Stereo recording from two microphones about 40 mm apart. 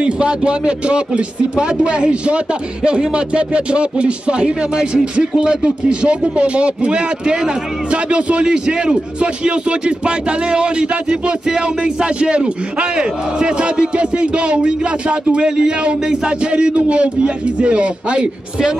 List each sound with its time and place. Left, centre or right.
0.0 s a man's voice: right